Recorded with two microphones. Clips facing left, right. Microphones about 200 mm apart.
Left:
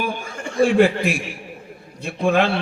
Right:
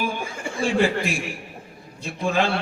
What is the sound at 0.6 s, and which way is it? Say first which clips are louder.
A man's voice: left 6 dB; 60° left (ahead or behind).